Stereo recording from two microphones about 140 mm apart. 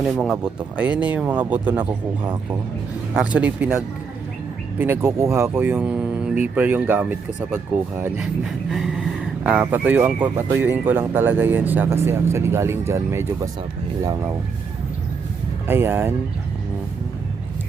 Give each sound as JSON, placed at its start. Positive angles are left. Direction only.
{"t": 0.0, "sound": "speech", "side_deg": 0}
{"t": 3.2, "sound": "speech", "side_deg": -10}
{"t": 4.8, "sound": "speech", "side_deg": -15}
{"t": 8.2, "sound": "speech", "side_deg": -5}
{"t": 15.6, "sound": "speech", "side_deg": -15}